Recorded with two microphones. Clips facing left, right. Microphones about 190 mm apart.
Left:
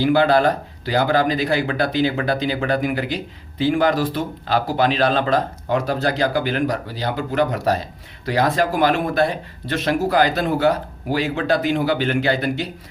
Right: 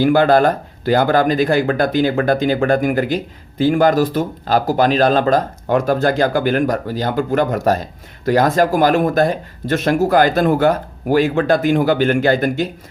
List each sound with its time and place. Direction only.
0.0 s speech: 50° right (ahead or behind)